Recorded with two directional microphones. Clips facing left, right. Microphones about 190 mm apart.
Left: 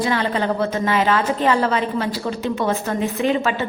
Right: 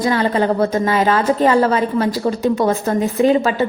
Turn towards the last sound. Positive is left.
turn(degrees=-35)  # may be behind; listen again after turning